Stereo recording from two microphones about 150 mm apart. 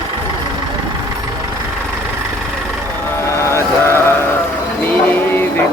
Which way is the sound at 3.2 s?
20° left (ahead or behind).